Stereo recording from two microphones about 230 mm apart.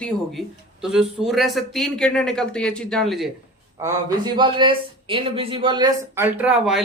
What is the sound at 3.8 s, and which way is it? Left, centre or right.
Speech, centre.